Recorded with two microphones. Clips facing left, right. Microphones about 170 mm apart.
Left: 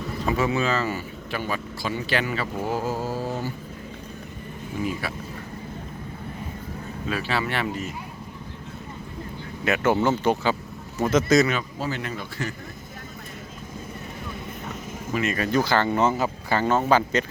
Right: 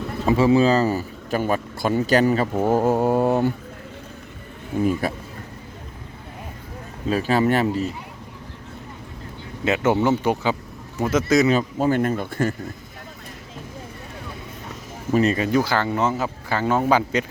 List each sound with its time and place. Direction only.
0.3 s speech: 30° right (ahead or behind); by 3.5 s 60° right (ahead or behind)
4.8 s speech: 45° right (ahead or behind)
7.1 s speech: 45° right (ahead or behind)
9.6 s speech: 20° right (ahead or behind)
11.8 s speech: 50° right (ahead or behind)
15.1 s speech: 35° right (ahead or behind)
15.5 s speech: 5° right (ahead or behind)